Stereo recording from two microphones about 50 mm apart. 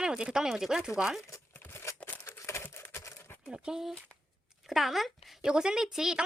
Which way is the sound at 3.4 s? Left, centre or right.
Centre.